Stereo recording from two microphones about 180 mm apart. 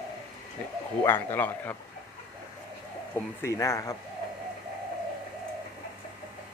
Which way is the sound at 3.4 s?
15° left (ahead or behind).